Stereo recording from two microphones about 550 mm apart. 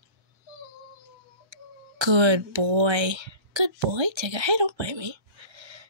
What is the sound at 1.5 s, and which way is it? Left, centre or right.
Speech, right.